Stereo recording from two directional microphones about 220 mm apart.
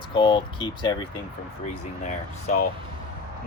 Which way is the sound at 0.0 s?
20° left (ahead or behind).